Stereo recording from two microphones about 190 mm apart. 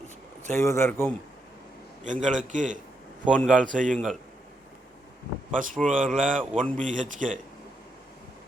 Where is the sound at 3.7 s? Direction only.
45° right (ahead or behind).